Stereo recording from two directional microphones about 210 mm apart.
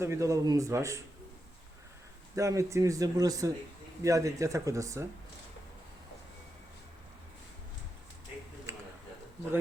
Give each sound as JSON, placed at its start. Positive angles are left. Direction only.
{"t": 0.0, "sound": "speech", "side_deg": -15}
{"t": 2.3, "sound": "speech", "side_deg": -15}